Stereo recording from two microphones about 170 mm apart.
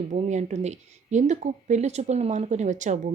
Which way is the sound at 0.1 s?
45° right (ahead or behind).